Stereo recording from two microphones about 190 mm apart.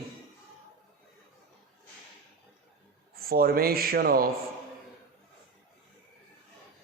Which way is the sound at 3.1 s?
50° right (ahead or behind).